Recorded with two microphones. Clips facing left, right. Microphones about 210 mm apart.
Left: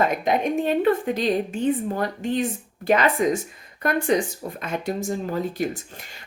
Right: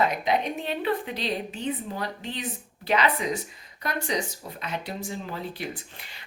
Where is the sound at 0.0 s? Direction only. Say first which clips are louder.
Left 3 dB; 50° left (ahead or behind).